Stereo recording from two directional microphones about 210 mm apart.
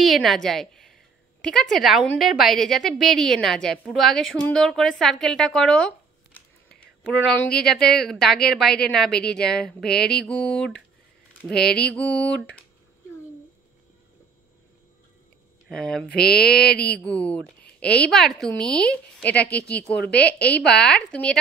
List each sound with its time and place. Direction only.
0.0 s a woman's voice: centre (ahead or behind)
15.7 s a woman's voice: 5° left (ahead or behind)
20.6 s a woman's voice: 5° left (ahead or behind)